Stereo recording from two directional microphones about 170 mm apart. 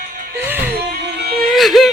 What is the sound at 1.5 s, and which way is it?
Whimper, centre (ahead or behind).